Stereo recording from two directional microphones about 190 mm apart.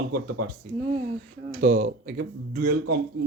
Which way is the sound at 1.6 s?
45° right (ahead or behind).